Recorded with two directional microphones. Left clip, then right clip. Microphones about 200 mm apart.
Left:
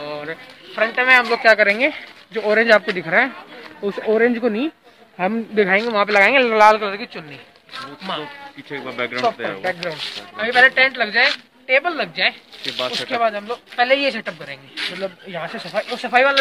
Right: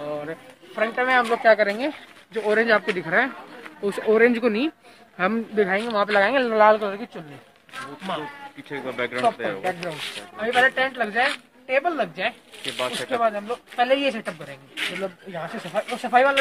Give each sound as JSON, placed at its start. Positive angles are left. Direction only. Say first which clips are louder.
{"t": 0.0, "sound": "speech", "louder": "left 2 dB", "side_deg": -10}
{"t": 1.4, "sound": "speech", "louder": "left 4 dB", "side_deg": 10}
{"t": 1.7, "sound": "speech", "louder": "left 8 dB", "side_deg": 25}
{"t": 3.8, "sound": "speech", "louder": "left 1 dB", "side_deg": 30}
{"t": 5.5, "sound": "speech", "louder": "left 5 dB", "side_deg": 40}
{"t": 6.7, "sound": "speech", "louder": "left 3 dB", "side_deg": 5}
{"t": 8.2, "sound": "speech", "louder": "left 3 dB", "side_deg": 40}
{"t": 9.8, "sound": "speech", "louder": "left 4 dB", "side_deg": 0}
{"t": 14.8, "sound": "speech", "louder": "left 2 dB", "side_deg": 30}
{"t": 15.3, "sound": "speech", "louder": "left 3 dB", "side_deg": 5}